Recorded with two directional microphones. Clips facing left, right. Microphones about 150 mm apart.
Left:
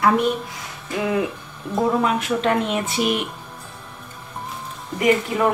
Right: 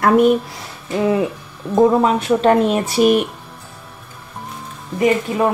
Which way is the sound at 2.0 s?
35° right (ahead or behind).